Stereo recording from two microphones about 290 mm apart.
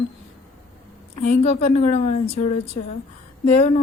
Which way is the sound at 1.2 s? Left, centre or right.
Left.